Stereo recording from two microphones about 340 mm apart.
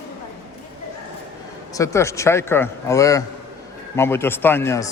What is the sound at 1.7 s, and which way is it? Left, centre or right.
Speech, centre.